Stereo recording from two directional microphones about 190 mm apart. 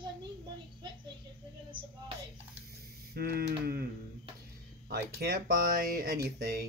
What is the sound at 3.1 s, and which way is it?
Speech, 55° right (ahead or behind).